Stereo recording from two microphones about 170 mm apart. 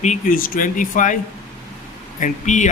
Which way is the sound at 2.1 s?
50° left (ahead or behind).